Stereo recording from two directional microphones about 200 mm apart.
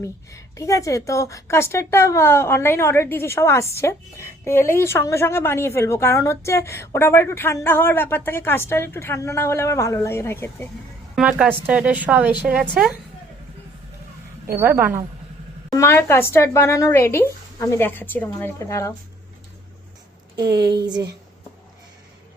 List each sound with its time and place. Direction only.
0.0 s a woman's voice: 15° left (ahead or behind)
11.1 s a woman's voice: 5° right (ahead or behind)
14.4 s a woman's voice: 10° right (ahead or behind)
15.7 s a woman's voice: 15° left (ahead or behind)
20.5 s speech: 55° right (ahead or behind)